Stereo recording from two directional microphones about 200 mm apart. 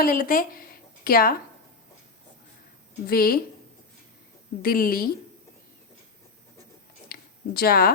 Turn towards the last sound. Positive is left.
turn(degrees=50)  # may be behind; listen again after turning